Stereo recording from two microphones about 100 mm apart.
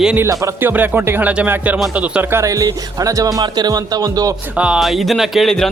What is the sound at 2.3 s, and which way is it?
Music, 35° right (ahead or behind).